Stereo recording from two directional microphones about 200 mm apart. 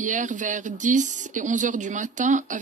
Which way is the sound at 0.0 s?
40° right (ahead or behind).